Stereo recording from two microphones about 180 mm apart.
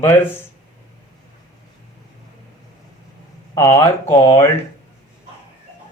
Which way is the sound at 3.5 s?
20° left (ahead or behind).